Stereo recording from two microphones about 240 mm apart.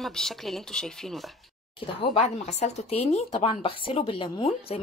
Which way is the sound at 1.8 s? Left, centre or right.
Left.